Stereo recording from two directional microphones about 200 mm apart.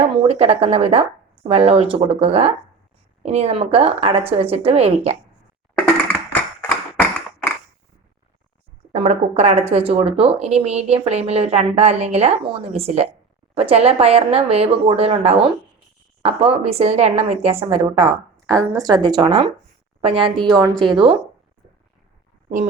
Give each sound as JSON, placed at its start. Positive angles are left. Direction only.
{"t": 0.2, "sound": "a woman's voice", "side_deg": -30}
{"t": 8.9, "sound": "a woman's voice", "side_deg": -35}
{"t": 22.4, "sound": "speech", "side_deg": -40}